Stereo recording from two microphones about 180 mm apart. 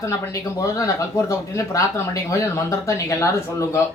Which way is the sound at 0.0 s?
15° left (ahead or behind).